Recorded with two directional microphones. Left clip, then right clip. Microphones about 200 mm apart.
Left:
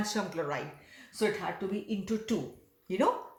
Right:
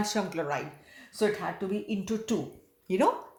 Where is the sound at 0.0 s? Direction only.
35° right (ahead or behind).